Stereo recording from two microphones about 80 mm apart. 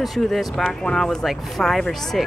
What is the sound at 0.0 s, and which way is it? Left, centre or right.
Speech, centre.